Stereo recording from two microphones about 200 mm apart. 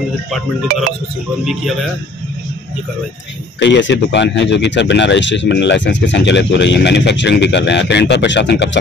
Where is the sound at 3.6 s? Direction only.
60° left (ahead or behind).